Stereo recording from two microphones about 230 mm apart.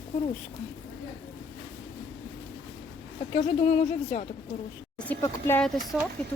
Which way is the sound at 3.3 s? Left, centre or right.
Left.